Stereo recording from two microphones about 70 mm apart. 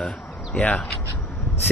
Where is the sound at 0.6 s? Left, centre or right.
Centre.